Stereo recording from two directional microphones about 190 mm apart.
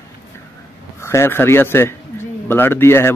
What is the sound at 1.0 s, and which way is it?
Speech, 15° left (ahead or behind).